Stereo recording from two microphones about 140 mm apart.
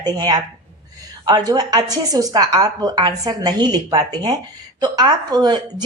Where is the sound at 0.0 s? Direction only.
30° right (ahead or behind).